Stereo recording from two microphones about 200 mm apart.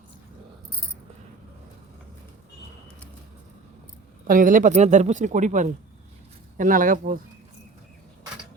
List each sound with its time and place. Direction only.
4.3 s speech: 40° right (ahead or behind)